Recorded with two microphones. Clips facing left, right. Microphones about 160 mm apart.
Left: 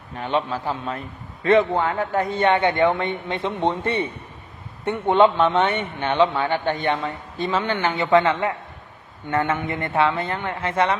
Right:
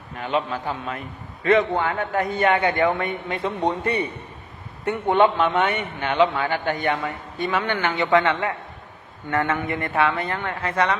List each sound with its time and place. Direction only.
0.3 s a man's voice: 30° left (ahead or behind)